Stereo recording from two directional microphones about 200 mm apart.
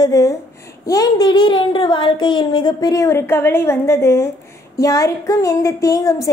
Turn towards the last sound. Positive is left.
turn(degrees=15)  # may be behind; listen again after turning